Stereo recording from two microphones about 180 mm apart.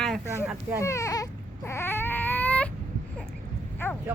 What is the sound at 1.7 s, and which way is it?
Baby cry, 15° left (ahead or behind).